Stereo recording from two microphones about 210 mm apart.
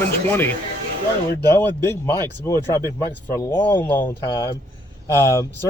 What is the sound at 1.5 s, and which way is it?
Speech, 10° left (ahead or behind).